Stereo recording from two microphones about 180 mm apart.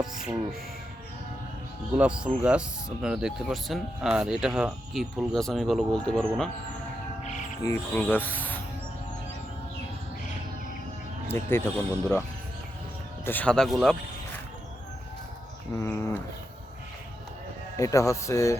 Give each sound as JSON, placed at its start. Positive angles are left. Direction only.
{"t": 0.0, "sound": "music", "side_deg": 0}
{"t": 1.9, "sound": "speech", "side_deg": -5}
{"t": 7.6, "sound": "a man's voice", "side_deg": 15}
{"t": 11.3, "sound": "a man's voice", "side_deg": 15}
{"t": 13.2, "sound": "speech", "side_deg": 10}
{"t": 15.8, "sound": "a man's voice", "side_deg": 15}
{"t": 17.7, "sound": "a man's voice", "side_deg": 15}